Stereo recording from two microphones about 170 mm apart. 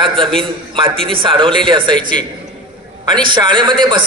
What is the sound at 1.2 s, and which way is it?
A man's voice, 30° right (ahead or behind).